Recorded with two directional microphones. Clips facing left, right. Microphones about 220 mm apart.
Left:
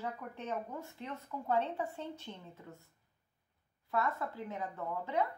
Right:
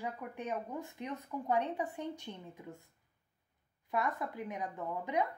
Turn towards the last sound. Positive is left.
turn(degrees=-15)  # may be behind; listen again after turning